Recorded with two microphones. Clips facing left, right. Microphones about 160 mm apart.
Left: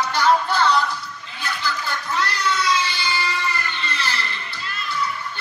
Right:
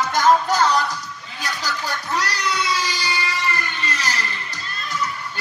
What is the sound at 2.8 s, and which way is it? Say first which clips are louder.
Vehicle: even; 40° right (ahead or behind).